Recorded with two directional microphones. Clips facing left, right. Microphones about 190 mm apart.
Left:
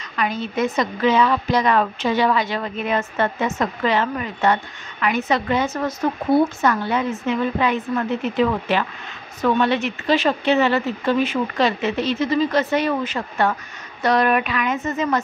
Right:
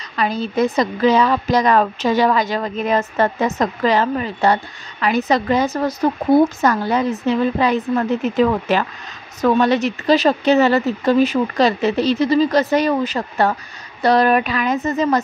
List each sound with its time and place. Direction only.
0.1 s a woman's voice: 35° right (ahead or behind)